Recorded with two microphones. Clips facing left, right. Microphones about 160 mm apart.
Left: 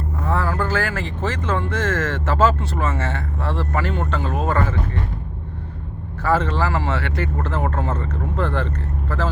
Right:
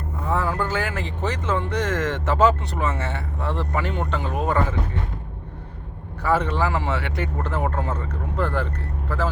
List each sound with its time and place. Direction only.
0.3 s speech: 15° right (ahead or behind)
6.2 s speech: 15° right (ahead or behind)